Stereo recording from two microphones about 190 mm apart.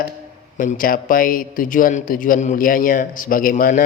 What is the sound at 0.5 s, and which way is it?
A man's voice, 45° left (ahead or behind).